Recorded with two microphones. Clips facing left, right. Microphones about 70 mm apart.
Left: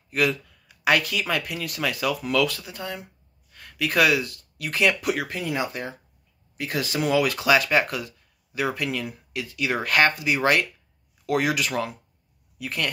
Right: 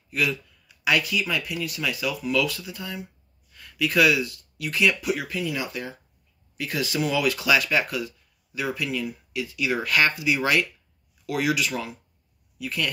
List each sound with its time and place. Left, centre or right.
0.1 s speech: left